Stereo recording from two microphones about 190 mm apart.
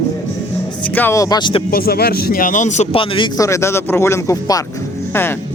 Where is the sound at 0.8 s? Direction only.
10° left (ahead or behind).